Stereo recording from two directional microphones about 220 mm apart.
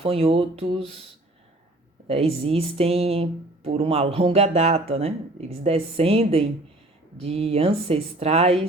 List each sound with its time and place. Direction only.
0.0 s speech: 25° right (ahead or behind)
2.0 s speech: 25° right (ahead or behind)